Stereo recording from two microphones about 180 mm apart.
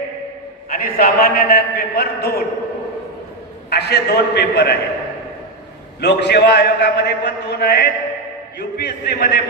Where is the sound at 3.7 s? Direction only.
65° left (ahead or behind).